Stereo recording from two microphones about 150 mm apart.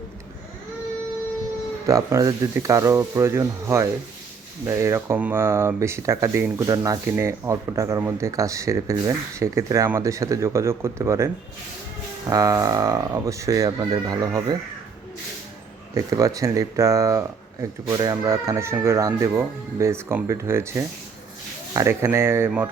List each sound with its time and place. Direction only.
1.9 s speech: 20° right (ahead or behind)
12.3 s speech: 25° right (ahead or behind)
16.0 s speech: 25° right (ahead or behind)